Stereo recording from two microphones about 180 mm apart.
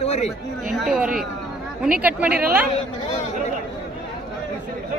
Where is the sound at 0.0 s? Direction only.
35° left (ahead or behind).